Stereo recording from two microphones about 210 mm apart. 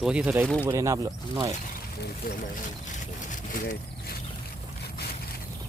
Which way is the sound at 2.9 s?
40° left (ahead or behind).